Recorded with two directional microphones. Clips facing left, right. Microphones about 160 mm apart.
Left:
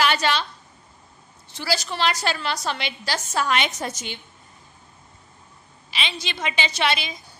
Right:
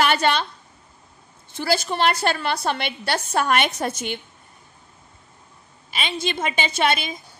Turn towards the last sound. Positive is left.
turn(degrees=-50)  # may be behind; listen again after turning